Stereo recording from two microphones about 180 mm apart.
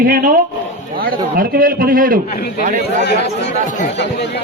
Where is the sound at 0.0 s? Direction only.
50° right (ahead or behind).